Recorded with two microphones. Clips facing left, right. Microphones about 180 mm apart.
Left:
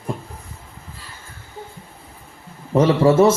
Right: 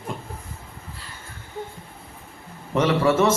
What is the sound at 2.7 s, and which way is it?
Speech, 30° left (ahead or behind).